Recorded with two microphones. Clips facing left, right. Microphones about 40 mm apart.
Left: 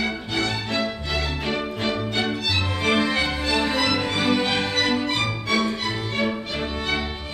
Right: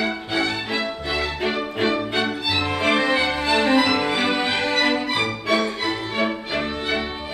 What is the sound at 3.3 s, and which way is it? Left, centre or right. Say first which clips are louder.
Music: right 5 dB; right.